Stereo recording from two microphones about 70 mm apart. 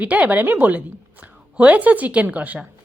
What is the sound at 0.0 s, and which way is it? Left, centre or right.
A woman's voice, right.